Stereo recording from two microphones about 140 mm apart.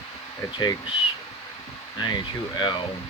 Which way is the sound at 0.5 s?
35° left (ahead or behind).